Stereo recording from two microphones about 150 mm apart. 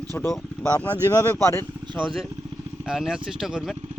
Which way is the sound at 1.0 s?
20° left (ahead or behind).